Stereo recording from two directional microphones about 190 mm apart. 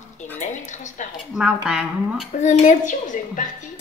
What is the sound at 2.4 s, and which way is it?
A child's voice, 40° left (ahead or behind).